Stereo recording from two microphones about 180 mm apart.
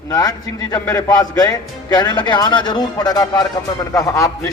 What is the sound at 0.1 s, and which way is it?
A man's voice, 20° left (ahead or behind).